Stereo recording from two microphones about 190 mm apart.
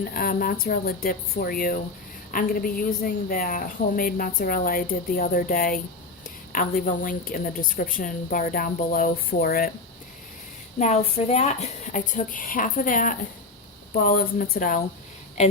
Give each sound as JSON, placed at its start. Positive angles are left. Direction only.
{"t": 0.1, "sound": "a woman's voice", "side_deg": 50}
{"t": 10.8, "sound": "a woman's voice", "side_deg": 35}
{"t": 15.4, "sound": "speech", "side_deg": 40}